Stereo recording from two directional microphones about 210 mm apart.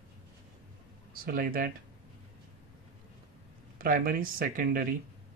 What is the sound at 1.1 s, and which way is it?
Speech, 45° right (ahead or behind).